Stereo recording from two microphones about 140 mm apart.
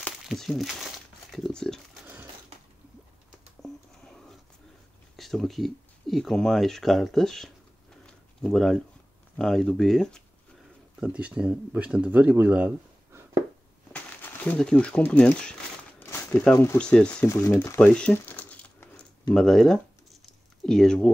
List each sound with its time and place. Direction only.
0.3 s speech: centre (ahead or behind)
3.6 s a sound: 5° left (ahead or behind)
5.1 s speech: centre (ahead or behind)
8.1 s a sound: 5° left (ahead or behind)
9.4 s speech: 5° left (ahead or behind)
11.0 s speech: 10° right (ahead or behind)
13.9 s speech: 10° left (ahead or behind)
16.0 s a sound: 20° left (ahead or behind)
16.5 s speech: 20° left (ahead or behind)
16.8 s speech: 5° left (ahead or behind)
17.3 s speech: 20° left (ahead or behind)
17.7 s crumpling: 10° left (ahead or behind)
19.3 s speech: 5° left (ahead or behind)